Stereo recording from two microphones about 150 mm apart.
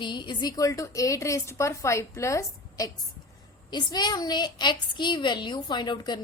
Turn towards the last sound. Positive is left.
turn(degrees=30)  # may be behind; listen again after turning